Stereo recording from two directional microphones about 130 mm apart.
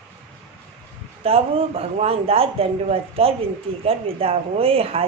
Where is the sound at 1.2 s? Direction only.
50° right (ahead or behind).